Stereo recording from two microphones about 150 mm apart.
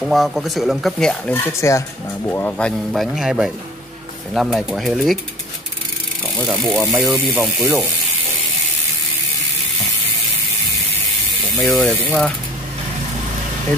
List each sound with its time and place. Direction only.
0.0 s speech: centre (ahead or behind)
6.2 s speech: centre (ahead or behind)
6.9 s speech: 15° right (ahead or behind)
7.3 s speech: centre (ahead or behind)
11.5 s speech: centre (ahead or behind)